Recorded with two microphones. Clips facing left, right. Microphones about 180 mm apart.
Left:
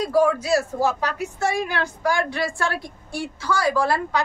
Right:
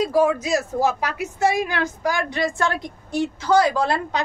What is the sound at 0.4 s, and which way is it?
A woman's voice, 15° right (ahead or behind).